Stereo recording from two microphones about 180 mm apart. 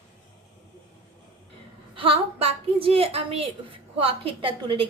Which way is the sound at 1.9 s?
30° right (ahead or behind).